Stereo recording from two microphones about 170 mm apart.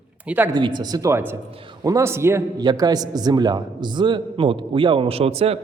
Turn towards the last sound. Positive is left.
turn(degrees=-35)  # may be behind; listen again after turning